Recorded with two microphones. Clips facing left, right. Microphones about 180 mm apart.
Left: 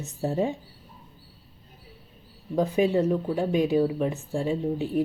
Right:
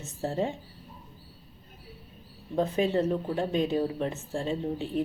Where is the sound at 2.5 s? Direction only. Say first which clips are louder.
Left 3 dB; 15° left (ahead or behind).